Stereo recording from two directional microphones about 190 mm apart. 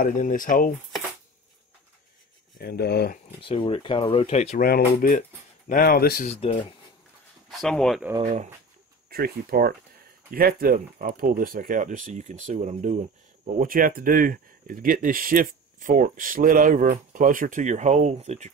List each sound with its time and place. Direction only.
0.0 s speech: 45° left (ahead or behind)
2.6 s speech: 60° left (ahead or behind)
3.3 s speech: 30° left (ahead or behind)
4.6 s speech: 50° left (ahead or behind)
6.2 s speech: 30° left (ahead or behind)
7.4 s speech: 5° left (ahead or behind)
8.2 s speech: 40° right (ahead or behind)
9.1 s speech: 50° right (ahead or behind); by 18.5 s 35° right (ahead or behind)